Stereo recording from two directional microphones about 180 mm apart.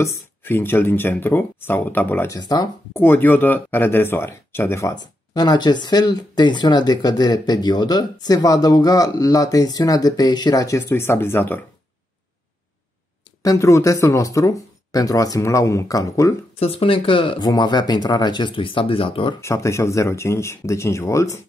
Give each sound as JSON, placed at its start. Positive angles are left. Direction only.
{"t": 0.0, "sound": "speech", "side_deg": 15}
{"t": 13.4, "sound": "speech", "side_deg": 15}
{"t": 16.5, "sound": "speech", "side_deg": 35}
{"t": 19.4, "sound": "speech", "side_deg": 15}